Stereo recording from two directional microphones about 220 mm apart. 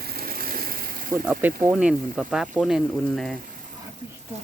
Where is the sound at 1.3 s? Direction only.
5° right (ahead or behind).